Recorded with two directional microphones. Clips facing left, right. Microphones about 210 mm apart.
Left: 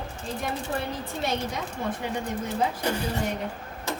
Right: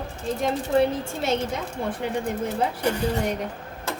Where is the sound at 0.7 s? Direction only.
25° right (ahead or behind).